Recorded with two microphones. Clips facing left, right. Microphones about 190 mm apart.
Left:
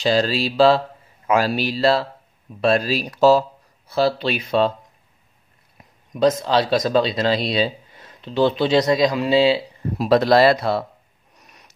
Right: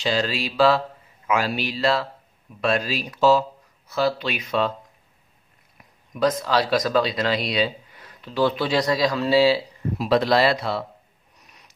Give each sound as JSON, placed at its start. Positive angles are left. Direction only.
{"t": 0.0, "sound": "speech", "side_deg": 35}
{"t": 6.1, "sound": "speech", "side_deg": 25}
{"t": 9.9, "sound": "speech", "side_deg": 40}